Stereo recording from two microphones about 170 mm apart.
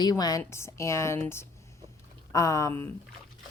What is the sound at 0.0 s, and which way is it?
A woman's voice, 25° left (ahead or behind).